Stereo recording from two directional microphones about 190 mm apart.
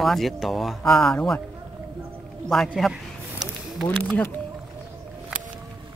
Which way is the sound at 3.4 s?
Centre (ahead or behind).